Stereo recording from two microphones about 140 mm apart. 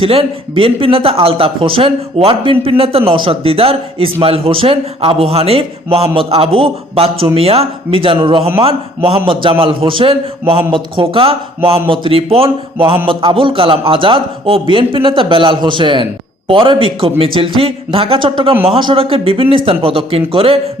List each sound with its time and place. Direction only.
0.0 s speech: 40° right (ahead or behind)